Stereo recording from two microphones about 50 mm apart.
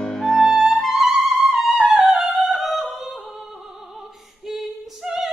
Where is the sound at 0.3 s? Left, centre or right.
Centre.